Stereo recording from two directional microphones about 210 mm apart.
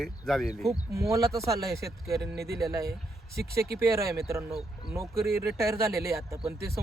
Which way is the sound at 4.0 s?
45° right (ahead or behind).